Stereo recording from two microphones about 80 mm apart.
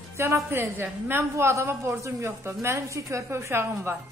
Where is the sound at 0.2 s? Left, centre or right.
Right.